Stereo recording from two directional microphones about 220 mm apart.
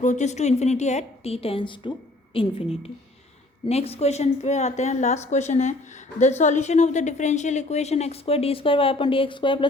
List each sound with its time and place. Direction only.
0.0 s a woman's voice: 35° left (ahead or behind)
3.7 s a woman's voice: 30° left (ahead or behind)